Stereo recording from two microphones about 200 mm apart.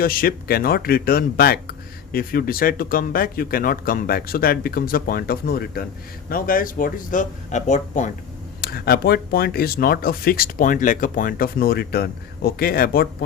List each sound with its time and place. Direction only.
0.0 s speech: 45° left (ahead or behind)
8.6 s speech: 50° left (ahead or behind)